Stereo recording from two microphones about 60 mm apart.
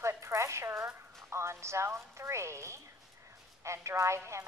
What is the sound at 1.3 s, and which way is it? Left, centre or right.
A woman's voice, right.